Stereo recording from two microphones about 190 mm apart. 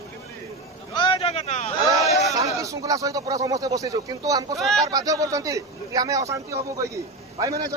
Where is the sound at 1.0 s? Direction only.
25° left (ahead or behind).